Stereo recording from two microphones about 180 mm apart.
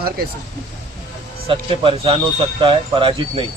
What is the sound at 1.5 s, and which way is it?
Speech, 30° right (ahead or behind).